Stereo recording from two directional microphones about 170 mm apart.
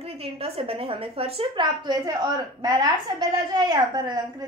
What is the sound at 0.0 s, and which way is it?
A woman's voice, 35° right (ahead or behind).